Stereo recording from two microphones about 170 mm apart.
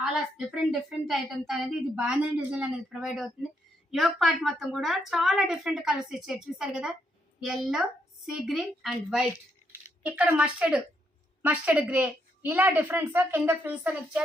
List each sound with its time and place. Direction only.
0.0 s a woman's voice: 5° right (ahead or behind)